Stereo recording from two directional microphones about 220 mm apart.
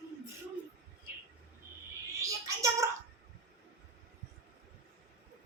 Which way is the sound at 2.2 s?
15° right (ahead or behind).